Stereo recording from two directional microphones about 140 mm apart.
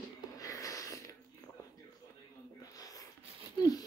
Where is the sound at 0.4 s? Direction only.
25° left (ahead or behind).